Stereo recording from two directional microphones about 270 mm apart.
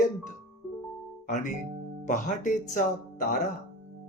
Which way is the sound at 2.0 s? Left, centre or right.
Left.